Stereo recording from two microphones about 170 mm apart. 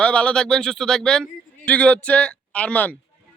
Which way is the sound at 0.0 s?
5° left (ahead or behind).